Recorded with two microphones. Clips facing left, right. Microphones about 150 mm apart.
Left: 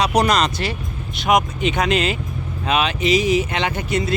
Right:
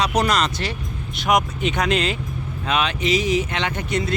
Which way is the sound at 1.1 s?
Centre (ahead or behind).